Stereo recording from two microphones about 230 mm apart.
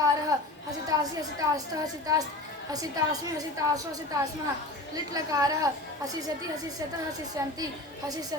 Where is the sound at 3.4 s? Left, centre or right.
Centre.